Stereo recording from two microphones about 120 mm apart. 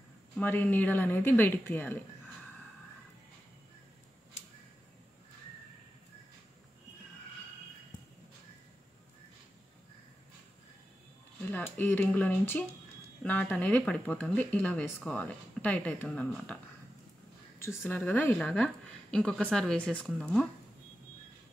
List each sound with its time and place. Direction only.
0.4 s speech: 15° left (ahead or behind)
11.7 s speech: 15° left (ahead or behind)
17.6 s a woman's voice: 25° left (ahead or behind); by 20.4 s 5° left (ahead or behind)